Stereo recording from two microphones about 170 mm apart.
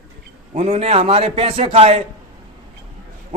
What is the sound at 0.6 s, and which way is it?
A man's voice, 35° right (ahead or behind).